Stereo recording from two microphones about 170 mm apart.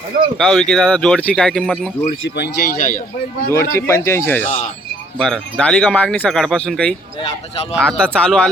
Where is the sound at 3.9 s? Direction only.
15° left (ahead or behind).